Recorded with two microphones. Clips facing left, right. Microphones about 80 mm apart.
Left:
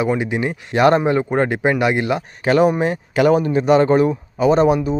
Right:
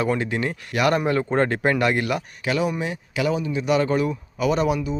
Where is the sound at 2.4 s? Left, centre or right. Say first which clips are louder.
Left 11 dB; left.